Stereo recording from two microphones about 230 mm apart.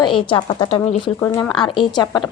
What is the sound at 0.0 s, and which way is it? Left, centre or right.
Speech, left.